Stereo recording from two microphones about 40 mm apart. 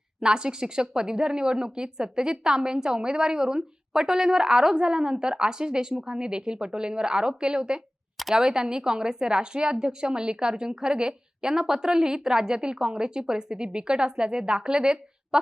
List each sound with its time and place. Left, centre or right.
0.2 s a woman's voice: right